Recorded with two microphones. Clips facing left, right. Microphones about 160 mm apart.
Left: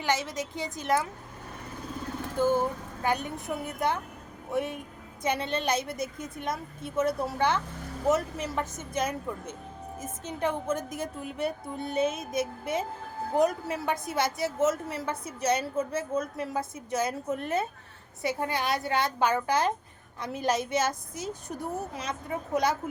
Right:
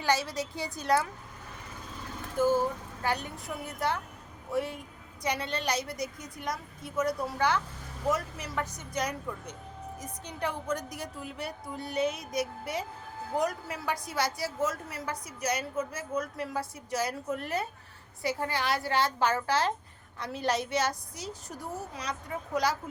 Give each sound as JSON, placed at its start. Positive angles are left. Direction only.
{"t": 0.0, "sound": "a woman's voice", "side_deg": 20}
{"t": 2.5, "sound": "a woman's voice", "side_deg": 20}